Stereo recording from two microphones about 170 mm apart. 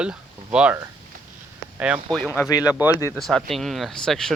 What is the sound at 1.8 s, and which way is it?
Speech, 10° right (ahead or behind).